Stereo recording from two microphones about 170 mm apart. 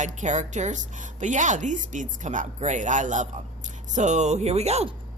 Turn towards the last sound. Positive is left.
turn(degrees=-40)  # may be behind; listen again after turning